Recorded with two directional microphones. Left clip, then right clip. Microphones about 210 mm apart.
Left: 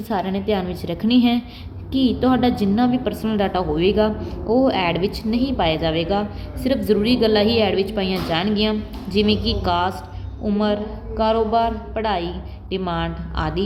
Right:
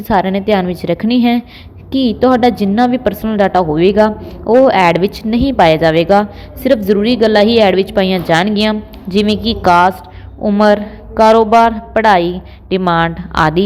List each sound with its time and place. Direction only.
0.0 s a woman's voice: 35° right (ahead or behind)